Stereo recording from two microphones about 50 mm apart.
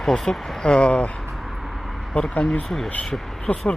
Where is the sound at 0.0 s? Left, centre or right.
Centre.